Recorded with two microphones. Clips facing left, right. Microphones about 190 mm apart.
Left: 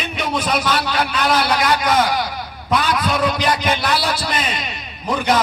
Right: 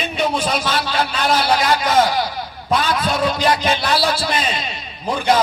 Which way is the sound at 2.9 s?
25° right (ahead or behind).